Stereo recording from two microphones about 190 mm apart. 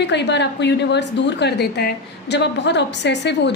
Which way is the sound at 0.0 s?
65° left (ahead or behind).